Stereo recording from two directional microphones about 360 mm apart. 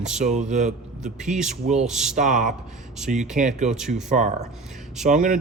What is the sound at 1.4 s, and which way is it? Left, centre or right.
Speech, centre.